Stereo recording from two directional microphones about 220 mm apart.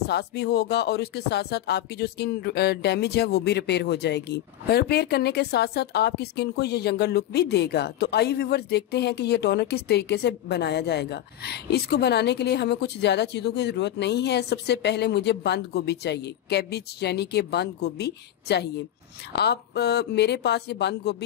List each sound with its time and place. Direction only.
0.0 s speech: 50° left (ahead or behind)